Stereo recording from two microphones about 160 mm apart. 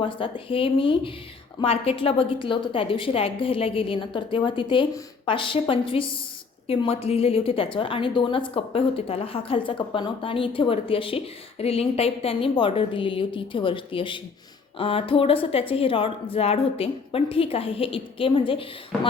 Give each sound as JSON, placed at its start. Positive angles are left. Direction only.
{"t": 0.0, "sound": "a woman's voice", "side_deg": 35}